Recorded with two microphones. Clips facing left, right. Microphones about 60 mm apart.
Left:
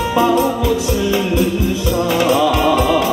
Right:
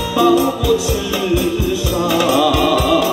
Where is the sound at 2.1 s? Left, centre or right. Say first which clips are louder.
Right 1 dB; left.